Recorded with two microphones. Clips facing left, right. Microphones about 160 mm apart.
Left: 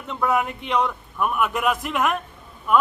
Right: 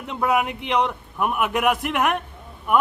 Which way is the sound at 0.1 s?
15° right (ahead or behind).